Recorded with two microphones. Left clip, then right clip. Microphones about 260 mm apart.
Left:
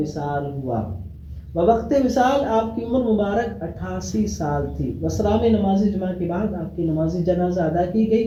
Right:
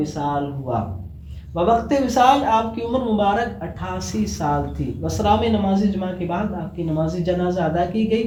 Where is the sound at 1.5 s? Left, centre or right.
Right.